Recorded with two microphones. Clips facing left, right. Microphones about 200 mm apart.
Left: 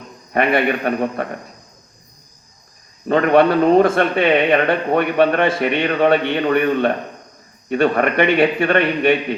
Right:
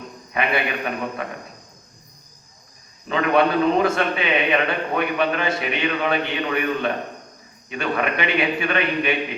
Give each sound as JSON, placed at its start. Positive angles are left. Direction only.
{"t": 0.3, "sound": "speech", "side_deg": 55}
{"t": 3.1, "sound": "a man's voice", "side_deg": 55}